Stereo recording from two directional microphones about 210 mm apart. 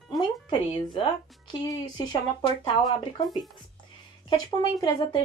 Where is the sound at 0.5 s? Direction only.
20° left (ahead or behind).